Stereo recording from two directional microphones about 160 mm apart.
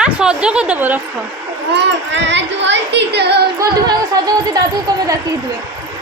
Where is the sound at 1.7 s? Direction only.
90° right.